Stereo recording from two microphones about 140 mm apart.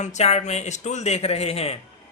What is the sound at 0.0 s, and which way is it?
Speech, 55° left (ahead or behind).